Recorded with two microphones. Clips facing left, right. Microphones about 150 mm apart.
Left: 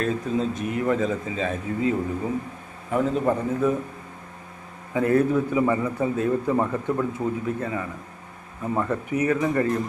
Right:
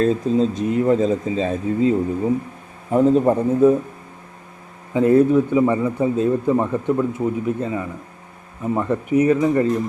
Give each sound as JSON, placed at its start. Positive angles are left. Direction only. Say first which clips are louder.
{"t": 0.0, "sound": "a man's voice", "louder": "right 7 dB", "side_deg": -30}
{"t": 4.9, "sound": "a man's voice", "louder": "right 6 dB", "side_deg": -20}